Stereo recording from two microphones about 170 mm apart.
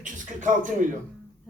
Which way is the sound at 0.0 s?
50° right (ahead or behind).